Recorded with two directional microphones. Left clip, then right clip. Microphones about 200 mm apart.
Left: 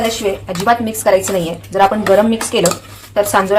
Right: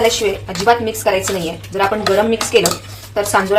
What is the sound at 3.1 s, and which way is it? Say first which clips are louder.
Speech: left 2 dB; 40° left (ahead or behind).